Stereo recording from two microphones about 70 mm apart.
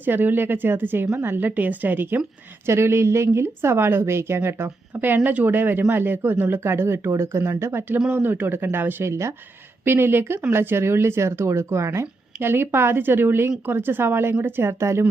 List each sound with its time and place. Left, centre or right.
0.0 s speech: right
2.6 s a woman's voice: right
7.9 s a woman's voice: right